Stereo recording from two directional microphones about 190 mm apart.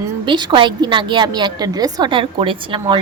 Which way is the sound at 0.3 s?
25° right (ahead or behind).